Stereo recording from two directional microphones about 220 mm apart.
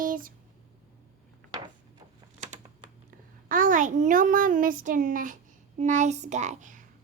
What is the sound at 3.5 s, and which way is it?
A child's voice, 35° right (ahead or behind).